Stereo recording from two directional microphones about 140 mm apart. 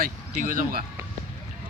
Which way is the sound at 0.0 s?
80° right.